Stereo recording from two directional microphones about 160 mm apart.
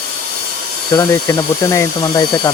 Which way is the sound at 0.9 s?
25° left (ahead or behind).